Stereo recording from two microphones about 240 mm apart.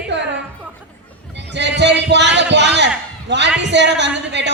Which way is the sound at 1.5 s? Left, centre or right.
Right.